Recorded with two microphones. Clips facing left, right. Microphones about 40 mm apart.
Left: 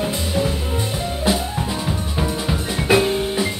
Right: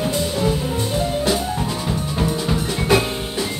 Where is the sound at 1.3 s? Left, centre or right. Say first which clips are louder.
Left 3 dB; centre.